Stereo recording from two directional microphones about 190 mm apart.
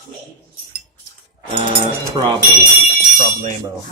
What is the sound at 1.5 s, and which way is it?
Speech, 25° right (ahead or behind).